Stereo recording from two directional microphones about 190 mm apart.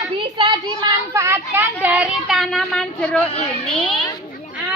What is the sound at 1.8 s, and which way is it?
Speech, 5° right (ahead or behind).